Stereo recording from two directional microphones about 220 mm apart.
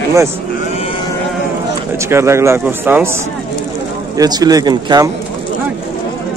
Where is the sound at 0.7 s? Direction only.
25° left (ahead or behind).